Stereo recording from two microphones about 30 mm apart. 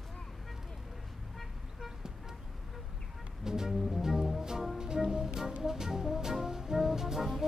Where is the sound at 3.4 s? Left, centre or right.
Centre.